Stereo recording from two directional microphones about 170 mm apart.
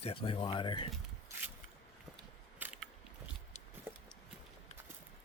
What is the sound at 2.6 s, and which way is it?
Biting, 10° right (ahead or behind).